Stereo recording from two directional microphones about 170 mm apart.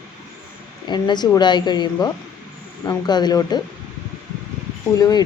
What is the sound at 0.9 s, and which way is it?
Speech, 25° left (ahead or behind).